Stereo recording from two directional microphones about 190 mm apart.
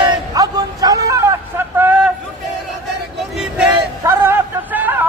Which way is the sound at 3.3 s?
Centre (ahead or behind).